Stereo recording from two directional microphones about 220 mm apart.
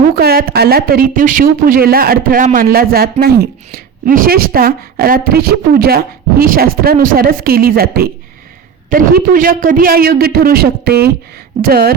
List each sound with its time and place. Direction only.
0.2 s speech: 45° right (ahead or behind)